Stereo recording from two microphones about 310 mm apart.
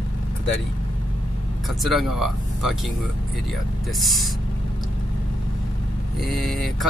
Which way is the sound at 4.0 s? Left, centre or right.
Centre.